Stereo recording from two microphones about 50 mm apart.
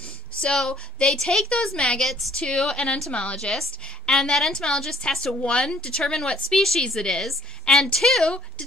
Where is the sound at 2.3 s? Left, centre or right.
Centre.